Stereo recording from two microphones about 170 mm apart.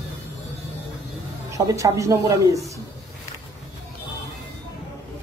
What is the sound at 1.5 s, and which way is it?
Speech, 20° right (ahead or behind).